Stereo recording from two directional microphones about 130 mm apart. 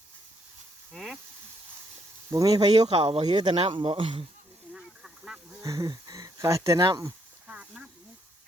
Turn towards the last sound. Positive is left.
turn(degrees=-10)  # may be behind; listen again after turning